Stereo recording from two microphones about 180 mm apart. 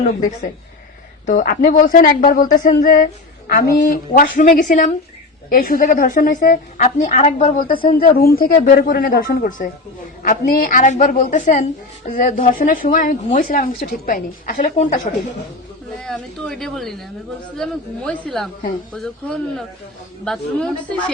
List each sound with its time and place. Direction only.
0.0 s speech: 55° left (ahead or behind)
1.3 s speech: 45° left (ahead or behind)
16.0 s speech: 5° left (ahead or behind)